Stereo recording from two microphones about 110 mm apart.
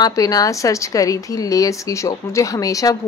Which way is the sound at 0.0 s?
35° left (ahead or behind).